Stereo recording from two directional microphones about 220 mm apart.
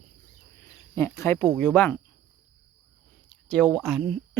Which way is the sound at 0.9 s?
10° left (ahead or behind).